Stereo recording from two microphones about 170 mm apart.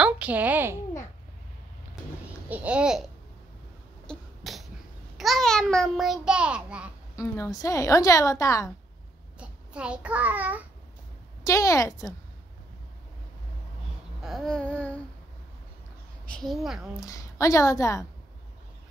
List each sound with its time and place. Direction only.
0.0 s a woman's voice: 10° right (ahead or behind)
2.5 s babbling: 10° right (ahead or behind)
4.1 s cough: centre (ahead or behind)
5.1 s a child's voice: centre (ahead or behind)
7.2 s a woman's voice: 15° left (ahead or behind)
9.4 s a child's voice: 5° right (ahead or behind)
11.4 s a woman's voice: 20° left (ahead or behind)
14.2 s babbling: centre (ahead or behind)
16.3 s a woman's voice: centre (ahead or behind)
17.0 s a woman's voice: 20° left (ahead or behind)